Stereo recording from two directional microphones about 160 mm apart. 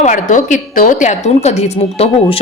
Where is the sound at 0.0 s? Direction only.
50° left (ahead or behind).